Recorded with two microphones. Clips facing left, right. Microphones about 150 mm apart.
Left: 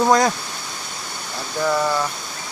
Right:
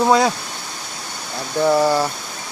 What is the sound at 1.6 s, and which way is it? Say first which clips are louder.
Speech: right 5 dB; 30° right (ahead or behind).